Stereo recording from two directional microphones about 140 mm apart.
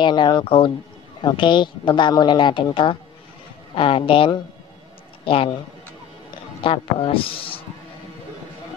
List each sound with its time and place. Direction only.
0.0 s speech: 30° left (ahead or behind)
6.6 s speech: 40° left (ahead or behind)